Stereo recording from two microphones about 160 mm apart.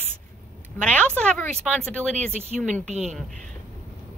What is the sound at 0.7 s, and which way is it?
Speech, 5° left (ahead or behind).